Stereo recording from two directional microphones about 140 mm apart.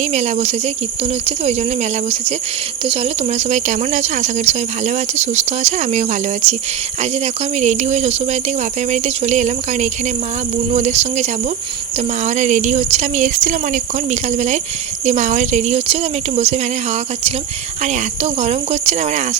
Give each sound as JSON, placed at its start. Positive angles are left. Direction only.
{"t": 0.0, "sound": "speech", "side_deg": -55}
{"t": 7.6, "sound": "speech", "side_deg": -55}
{"t": 17.8, "sound": "speech", "side_deg": -55}